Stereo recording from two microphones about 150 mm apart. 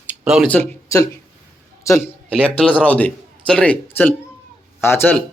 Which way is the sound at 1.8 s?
20° left (ahead or behind).